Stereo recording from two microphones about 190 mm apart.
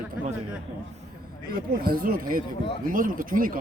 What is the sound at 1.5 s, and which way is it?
Speech, 50° right (ahead or behind).